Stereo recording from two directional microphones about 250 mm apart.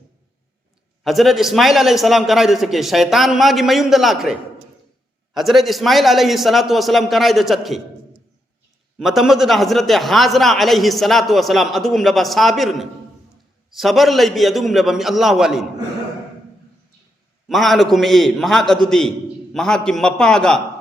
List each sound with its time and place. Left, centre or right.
1.0 s a man's voice: centre
9.0 s a man's voice: centre
17.5 s a man's voice: centre